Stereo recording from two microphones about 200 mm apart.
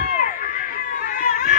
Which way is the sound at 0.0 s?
45° left (ahead or behind).